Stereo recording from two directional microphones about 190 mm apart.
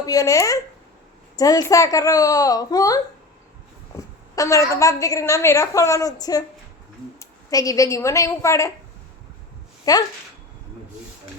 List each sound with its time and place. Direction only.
0.0 s a woman's voice: 20° left (ahead or behind)
9.9 s a child's voice: 20° left (ahead or behind)